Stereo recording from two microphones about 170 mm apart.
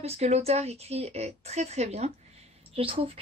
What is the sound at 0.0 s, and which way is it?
A woman's voice, 40° right (ahead or behind).